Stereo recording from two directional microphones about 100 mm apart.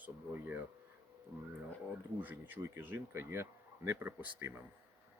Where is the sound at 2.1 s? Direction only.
20° right (ahead or behind).